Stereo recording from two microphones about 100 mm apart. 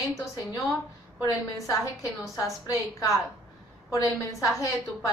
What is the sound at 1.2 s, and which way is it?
A woman's voice, 35° left (ahead or behind).